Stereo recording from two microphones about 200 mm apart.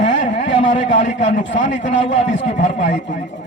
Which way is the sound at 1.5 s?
65° left (ahead or behind).